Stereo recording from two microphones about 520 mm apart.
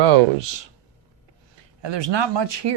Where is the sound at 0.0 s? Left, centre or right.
Right.